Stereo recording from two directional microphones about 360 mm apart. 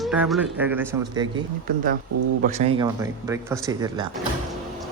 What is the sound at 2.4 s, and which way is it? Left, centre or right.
Speech, centre.